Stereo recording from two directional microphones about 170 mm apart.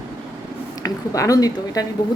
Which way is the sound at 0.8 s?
20° left (ahead or behind).